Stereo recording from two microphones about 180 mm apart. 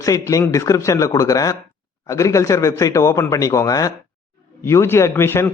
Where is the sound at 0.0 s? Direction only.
20° left (ahead or behind).